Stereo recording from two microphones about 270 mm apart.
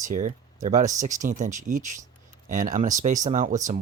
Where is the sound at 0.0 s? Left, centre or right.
Right.